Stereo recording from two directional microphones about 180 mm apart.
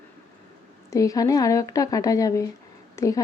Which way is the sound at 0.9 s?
20° left (ahead or behind).